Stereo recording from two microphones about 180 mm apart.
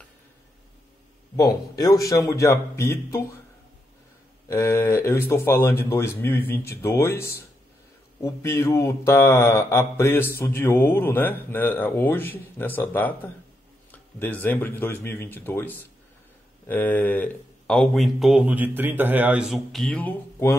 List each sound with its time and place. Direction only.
1.3 s mantra: 20° left (ahead or behind)
4.5 s mantra: 15° left (ahead or behind)
16.6 s speech: 10° left (ahead or behind)